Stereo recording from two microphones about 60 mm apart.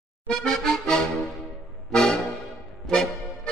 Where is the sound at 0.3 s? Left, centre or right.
Centre.